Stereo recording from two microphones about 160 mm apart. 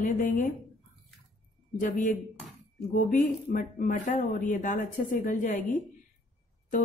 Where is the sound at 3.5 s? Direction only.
55° left (ahead or behind).